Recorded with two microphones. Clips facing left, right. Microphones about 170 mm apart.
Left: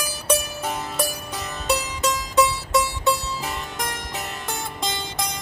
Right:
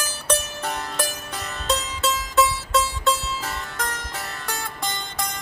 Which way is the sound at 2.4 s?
15° left (ahead or behind).